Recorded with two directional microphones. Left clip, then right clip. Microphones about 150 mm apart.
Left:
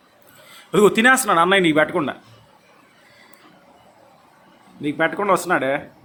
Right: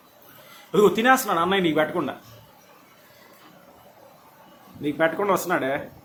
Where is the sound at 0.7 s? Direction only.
60° left (ahead or behind).